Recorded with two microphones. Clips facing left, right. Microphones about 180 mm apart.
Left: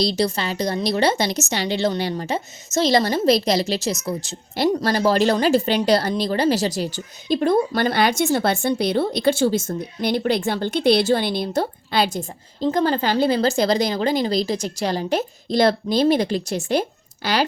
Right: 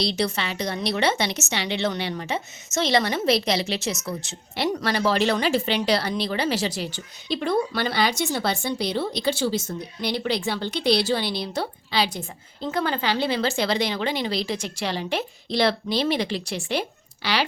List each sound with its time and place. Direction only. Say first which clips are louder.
0.0 s speech: left 4 dB; 40° left (ahead or behind)